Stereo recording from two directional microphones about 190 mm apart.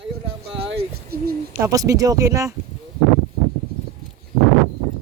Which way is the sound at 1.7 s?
15° right (ahead or behind).